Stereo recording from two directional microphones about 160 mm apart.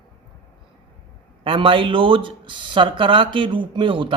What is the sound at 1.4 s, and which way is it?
Speech, 35° right (ahead or behind).